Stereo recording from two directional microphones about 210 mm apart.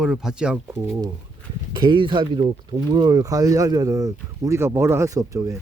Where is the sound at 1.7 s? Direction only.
25° right (ahead or behind).